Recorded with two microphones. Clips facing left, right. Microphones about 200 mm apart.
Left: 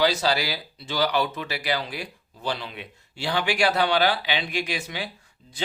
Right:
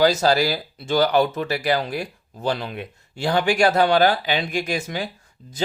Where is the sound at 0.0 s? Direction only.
45° right (ahead or behind).